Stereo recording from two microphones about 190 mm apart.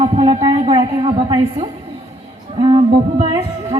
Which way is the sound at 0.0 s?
30° right (ahead or behind).